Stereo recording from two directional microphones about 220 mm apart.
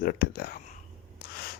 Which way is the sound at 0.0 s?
45° left (ahead or behind).